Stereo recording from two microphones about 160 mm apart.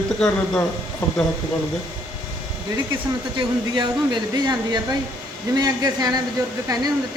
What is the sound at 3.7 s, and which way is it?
Speech, 25° right (ahead or behind).